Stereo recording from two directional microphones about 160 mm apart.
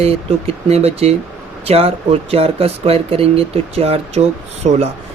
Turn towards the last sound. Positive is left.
turn(degrees=-45)  # may be behind; listen again after turning